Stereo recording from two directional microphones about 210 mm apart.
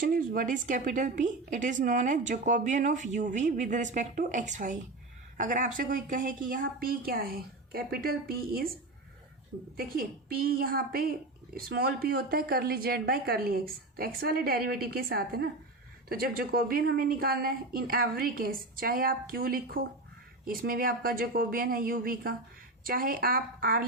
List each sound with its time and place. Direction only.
0.0 s a woman's voice: 40° right (ahead or behind)
9.7 s speech: 45° right (ahead or behind)